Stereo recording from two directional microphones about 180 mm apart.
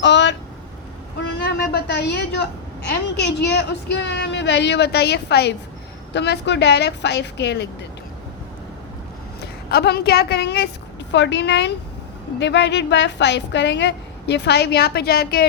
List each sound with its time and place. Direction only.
0.0 s vehicle: 80° left
1.2 s a sound: 70° left (ahead or behind)
2.9 s a woman's voice: 70° left (ahead or behind)
9.4 s a woman's voice: 65° left (ahead or behind)
11.1 s a woman's voice: 80° left; by 15.4 s 60° left (ahead or behind)